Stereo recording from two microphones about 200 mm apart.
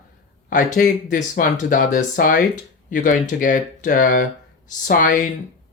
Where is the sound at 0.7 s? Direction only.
40° left (ahead or behind).